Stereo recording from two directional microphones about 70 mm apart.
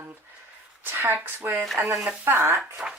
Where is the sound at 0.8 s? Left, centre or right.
Right.